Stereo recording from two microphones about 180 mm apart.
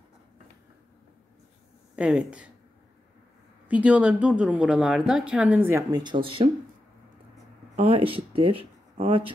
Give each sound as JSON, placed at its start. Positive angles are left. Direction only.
{"t": 2.0, "sound": "speech", "side_deg": -5}
{"t": 3.6, "sound": "speech", "side_deg": -5}
{"t": 7.7, "sound": "speech", "side_deg": -30}